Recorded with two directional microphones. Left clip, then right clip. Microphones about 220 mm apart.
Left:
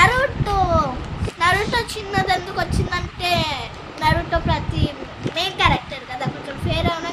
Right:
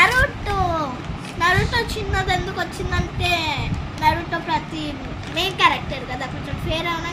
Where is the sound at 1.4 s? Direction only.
25° left (ahead or behind).